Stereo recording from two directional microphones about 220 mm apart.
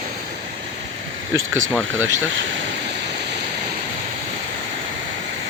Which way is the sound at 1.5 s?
15° right (ahead or behind).